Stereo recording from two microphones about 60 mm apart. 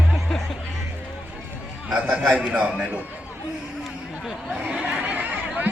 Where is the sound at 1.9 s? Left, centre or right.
Right.